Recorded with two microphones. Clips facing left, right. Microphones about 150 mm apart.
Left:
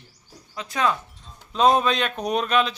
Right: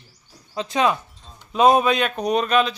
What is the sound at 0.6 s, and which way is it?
Speech, 20° right (ahead or behind).